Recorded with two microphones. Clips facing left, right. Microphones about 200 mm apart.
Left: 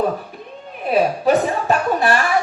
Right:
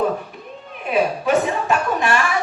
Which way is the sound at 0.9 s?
35° left (ahead or behind).